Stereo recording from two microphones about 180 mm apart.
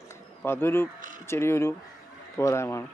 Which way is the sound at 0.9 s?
50° right (ahead or behind).